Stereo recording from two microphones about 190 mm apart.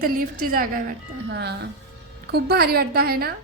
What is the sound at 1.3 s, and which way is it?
A woman's voice, 60° right (ahead or behind).